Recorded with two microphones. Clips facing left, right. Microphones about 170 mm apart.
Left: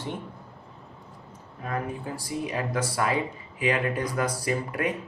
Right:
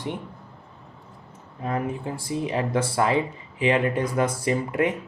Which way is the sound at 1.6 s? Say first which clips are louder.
Right 4 dB; 25° right (ahead or behind).